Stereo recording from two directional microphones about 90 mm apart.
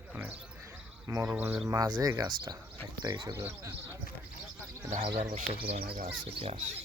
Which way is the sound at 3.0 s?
55° right (ahead or behind).